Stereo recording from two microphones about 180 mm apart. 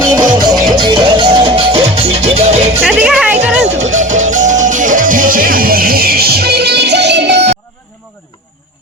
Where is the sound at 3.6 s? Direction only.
40° right (ahead or behind); by 7.6 s 70° right (ahead or behind).